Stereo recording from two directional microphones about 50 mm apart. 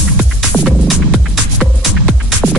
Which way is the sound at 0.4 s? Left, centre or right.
Centre.